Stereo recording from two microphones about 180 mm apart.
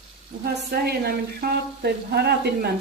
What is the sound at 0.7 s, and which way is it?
Speech, 60° right (ahead or behind).